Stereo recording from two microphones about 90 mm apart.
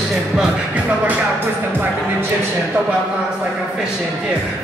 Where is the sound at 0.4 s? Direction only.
15° right (ahead or behind).